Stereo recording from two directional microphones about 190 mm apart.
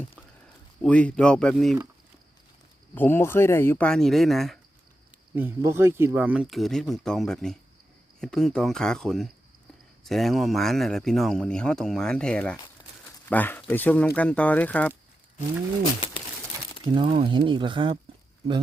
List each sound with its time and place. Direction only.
0.8 s speech: 5° left (ahead or behind)
2.9 s speech: 10° left (ahead or behind)
5.3 s speech: 10° right (ahead or behind); by 14.9 s 10° left (ahead or behind)
16.9 s speech: 30° right (ahead or behind)